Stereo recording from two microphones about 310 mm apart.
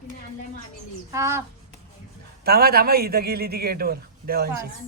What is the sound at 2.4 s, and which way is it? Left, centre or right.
A man's voice, right.